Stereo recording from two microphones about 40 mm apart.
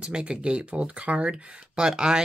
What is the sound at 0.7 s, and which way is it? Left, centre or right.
A woman's voice, right.